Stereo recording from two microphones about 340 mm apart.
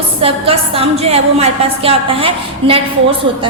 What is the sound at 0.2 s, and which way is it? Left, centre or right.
A woman's voice, centre.